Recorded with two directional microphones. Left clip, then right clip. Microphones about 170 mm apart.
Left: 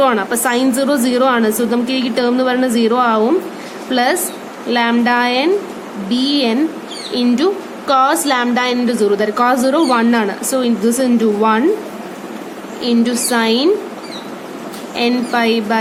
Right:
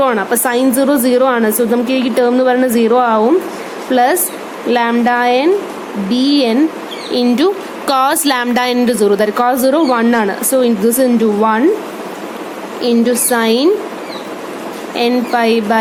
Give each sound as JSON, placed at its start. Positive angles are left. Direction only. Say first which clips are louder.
{"t": 0.0, "sound": "a woman's voice", "louder": "right 1 dB", "side_deg": -35}
{"t": 12.8, "sound": "a woman's voice", "louder": "right 3 dB", "side_deg": -40}
{"t": 14.9, "sound": "a woman's voice", "louder": "right 2 dB", "side_deg": -40}